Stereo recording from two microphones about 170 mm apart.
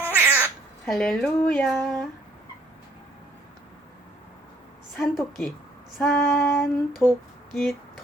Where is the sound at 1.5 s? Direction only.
10° left (ahead or behind).